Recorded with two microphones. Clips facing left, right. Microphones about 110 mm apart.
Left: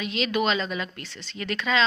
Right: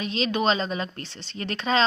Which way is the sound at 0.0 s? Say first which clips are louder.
Right 1 dB; 30° right (ahead or behind).